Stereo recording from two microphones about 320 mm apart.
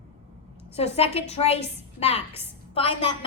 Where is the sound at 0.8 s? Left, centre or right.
Centre.